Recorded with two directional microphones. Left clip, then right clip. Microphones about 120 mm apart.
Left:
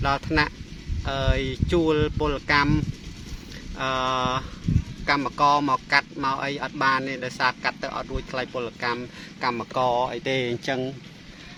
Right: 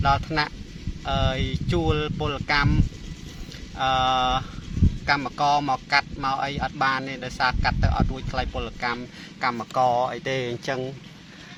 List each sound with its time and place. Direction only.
0.0 s speech: 25° left (ahead or behind)